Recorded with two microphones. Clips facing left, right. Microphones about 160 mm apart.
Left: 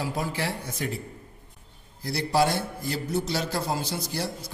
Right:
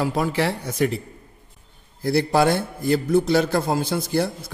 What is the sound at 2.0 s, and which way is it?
A man's voice, 55° right (ahead or behind).